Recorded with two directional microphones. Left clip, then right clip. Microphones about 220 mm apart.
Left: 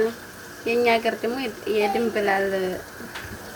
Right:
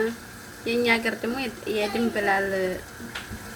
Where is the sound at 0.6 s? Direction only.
10° left (ahead or behind).